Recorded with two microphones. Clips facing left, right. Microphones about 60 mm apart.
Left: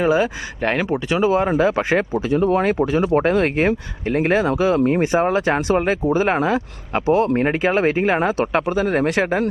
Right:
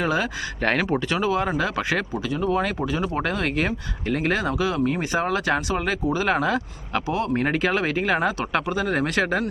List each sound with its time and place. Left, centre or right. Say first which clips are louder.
0.0 s speech: left 6 dB; centre